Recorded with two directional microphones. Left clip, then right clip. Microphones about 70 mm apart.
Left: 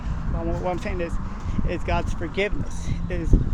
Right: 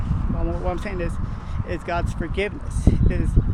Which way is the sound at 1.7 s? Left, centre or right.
Right.